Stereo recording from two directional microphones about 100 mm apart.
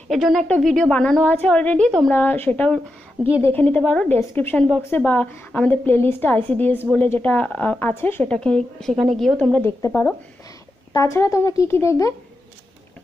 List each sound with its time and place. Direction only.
0.1 s a woman's voice: centre (ahead or behind)
2.1 s a woman's voice: 20° left (ahead or behind)
4.3 s a woman's voice: 20° left (ahead or behind)
8.3 s a woman's voice: 10° left (ahead or behind)
9.6 s a woman's voice: 25° left (ahead or behind)